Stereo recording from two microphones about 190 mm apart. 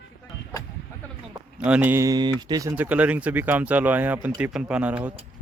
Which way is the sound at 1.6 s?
10° right (ahead or behind).